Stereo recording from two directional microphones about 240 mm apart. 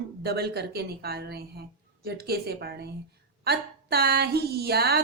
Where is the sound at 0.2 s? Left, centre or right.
Right.